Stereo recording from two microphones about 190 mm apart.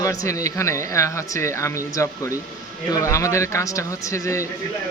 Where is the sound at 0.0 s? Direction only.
15° left (ahead or behind).